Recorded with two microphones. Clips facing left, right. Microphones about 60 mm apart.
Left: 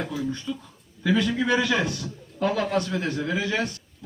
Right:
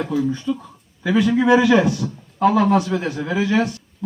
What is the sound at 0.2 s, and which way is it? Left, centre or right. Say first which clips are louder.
A man's voice: right 8 dB; centre.